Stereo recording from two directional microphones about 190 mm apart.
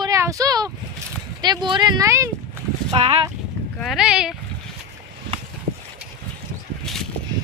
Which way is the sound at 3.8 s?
Centre (ahead or behind).